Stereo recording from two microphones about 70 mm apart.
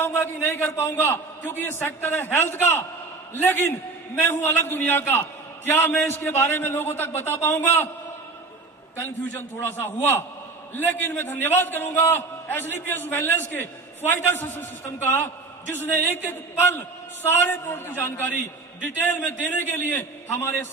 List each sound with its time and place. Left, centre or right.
0.0 s a man's voice: left
6.2 s a man's voice: left
9.3 s a man's voice: left